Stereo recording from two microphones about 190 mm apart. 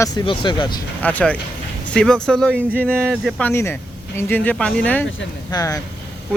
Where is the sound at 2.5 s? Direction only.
10° right (ahead or behind).